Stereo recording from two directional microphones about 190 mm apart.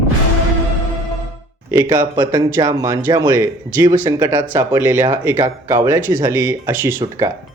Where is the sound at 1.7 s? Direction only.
10° right (ahead or behind).